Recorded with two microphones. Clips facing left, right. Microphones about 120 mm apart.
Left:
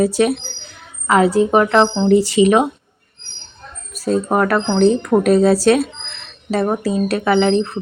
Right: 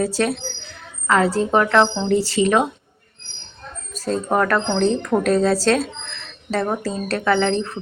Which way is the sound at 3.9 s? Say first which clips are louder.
Left 3 dB; 10° left (ahead or behind).